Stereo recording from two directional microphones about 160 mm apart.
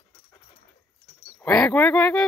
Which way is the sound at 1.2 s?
5° left (ahead or behind).